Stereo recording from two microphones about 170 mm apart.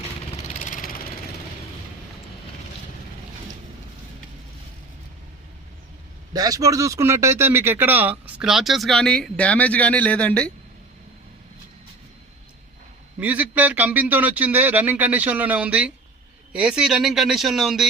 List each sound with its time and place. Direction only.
0.4 s vehicle: 45° left (ahead or behind)
6.3 s speech: 20° right (ahead or behind); by 10.5 s 5° left (ahead or behind)
13.1 s a man's voice: 10° right (ahead or behind)